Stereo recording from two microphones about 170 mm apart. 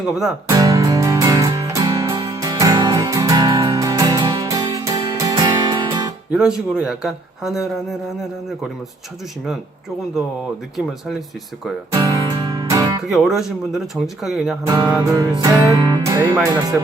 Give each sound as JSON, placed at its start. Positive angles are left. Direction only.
{"t": 0.4, "sound": "music", "side_deg": -20}
{"t": 6.3, "sound": "speech", "side_deg": -5}
{"t": 11.9, "sound": "music", "side_deg": -25}
{"t": 13.1, "sound": "speech", "side_deg": 0}
{"t": 14.6, "sound": "music", "side_deg": -25}